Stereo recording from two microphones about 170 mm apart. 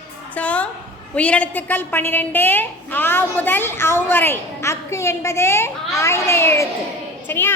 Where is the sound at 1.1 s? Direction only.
10° left (ahead or behind).